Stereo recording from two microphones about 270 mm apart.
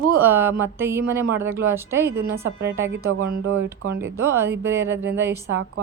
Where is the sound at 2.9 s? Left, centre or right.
Right.